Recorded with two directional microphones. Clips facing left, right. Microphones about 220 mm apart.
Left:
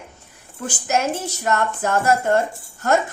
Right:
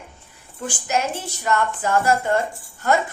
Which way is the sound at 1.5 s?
45° left (ahead or behind).